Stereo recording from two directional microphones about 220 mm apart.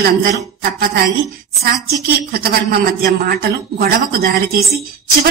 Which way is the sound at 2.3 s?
45° right (ahead or behind).